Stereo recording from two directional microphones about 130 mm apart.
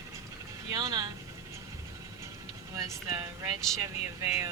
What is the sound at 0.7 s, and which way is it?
Speech, 30° right (ahead or behind).